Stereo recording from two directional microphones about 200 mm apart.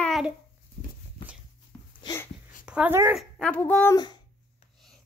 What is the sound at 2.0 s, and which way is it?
Dog, 20° left (ahead or behind).